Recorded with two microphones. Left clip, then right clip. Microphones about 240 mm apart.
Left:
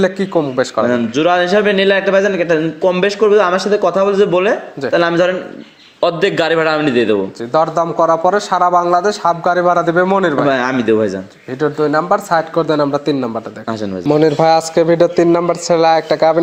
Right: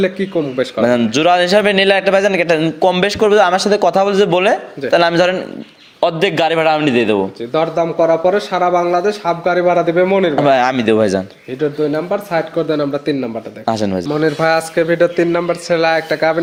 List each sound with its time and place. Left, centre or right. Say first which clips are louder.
0.0 s speech: left 2 dB; left
0.9 s a man's voice: right 5 dB; right
7.5 s speech: left 2 dB; centre
10.3 s a man's voice: right 2 dB; right
11.9 s speech: left 4 dB; left
13.7 s a man's voice: right 7 dB; right
14.1 s speech: left 5 dB; left